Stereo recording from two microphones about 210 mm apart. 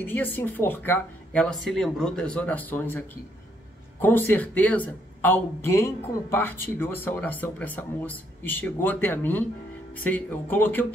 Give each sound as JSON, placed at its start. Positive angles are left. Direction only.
{"t": 0.0, "sound": "speech", "side_deg": 10}
{"t": 4.0, "sound": "speech", "side_deg": 10}